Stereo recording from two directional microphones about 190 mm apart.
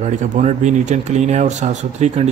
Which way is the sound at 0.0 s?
35° right (ahead or behind).